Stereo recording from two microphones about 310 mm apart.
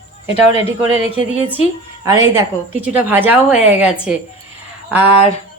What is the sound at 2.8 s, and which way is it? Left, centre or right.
A woman's voice, centre.